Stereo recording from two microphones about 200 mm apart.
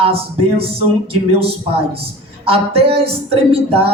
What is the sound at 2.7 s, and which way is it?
Speech, 30° right (ahead or behind).